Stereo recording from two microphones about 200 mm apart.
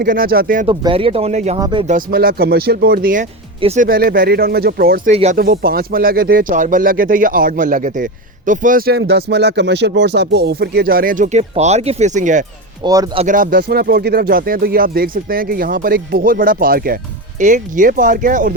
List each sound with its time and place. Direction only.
0.0 s speech: 45° right (ahead or behind)
0.7 s speech: 25° right (ahead or behind)
1.5 s speech: 20° right (ahead or behind)
1.9 s speech: 45° right (ahead or behind)
3.6 s speech: 30° right (ahead or behind)
3.8 s speech: 45° right (ahead or behind)
5.1 s speech: 35° right (ahead or behind)
5.4 s speech: 50° right (ahead or behind)
12.8 s speech: 20° right (ahead or behind)
13.2 s speech: 40° right (ahead or behind)